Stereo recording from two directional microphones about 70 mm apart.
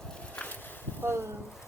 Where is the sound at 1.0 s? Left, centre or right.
Right.